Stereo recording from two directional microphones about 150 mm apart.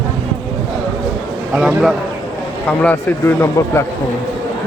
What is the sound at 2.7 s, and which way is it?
Speech, 15° left (ahead or behind).